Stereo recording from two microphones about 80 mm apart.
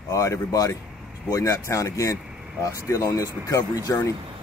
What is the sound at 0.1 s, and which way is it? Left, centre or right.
Speech, left.